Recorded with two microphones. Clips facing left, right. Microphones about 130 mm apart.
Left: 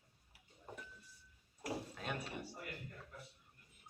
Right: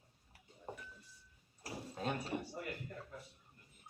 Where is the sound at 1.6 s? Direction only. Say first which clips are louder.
Right 2 dB; 30° right (ahead or behind).